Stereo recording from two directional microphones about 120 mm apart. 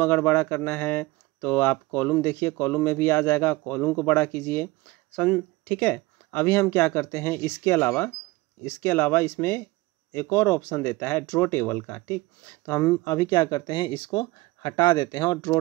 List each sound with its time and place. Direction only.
0.0 s speech: 20° left (ahead or behind); by 15.3 s 35° left (ahead or behind)